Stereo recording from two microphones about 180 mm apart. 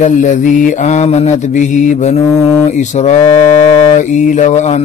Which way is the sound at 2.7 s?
40° left (ahead or behind).